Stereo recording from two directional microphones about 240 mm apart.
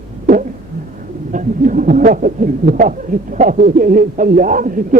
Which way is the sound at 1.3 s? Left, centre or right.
Right.